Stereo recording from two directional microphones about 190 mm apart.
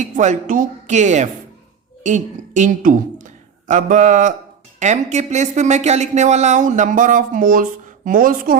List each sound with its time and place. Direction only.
0.0 s speech: 40° right (ahead or behind)